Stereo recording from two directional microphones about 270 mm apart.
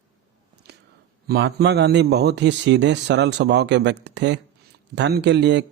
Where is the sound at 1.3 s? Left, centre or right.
Right.